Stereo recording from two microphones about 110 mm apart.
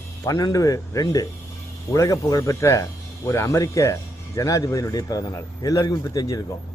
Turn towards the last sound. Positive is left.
turn(degrees=35)  # may be behind; listen again after turning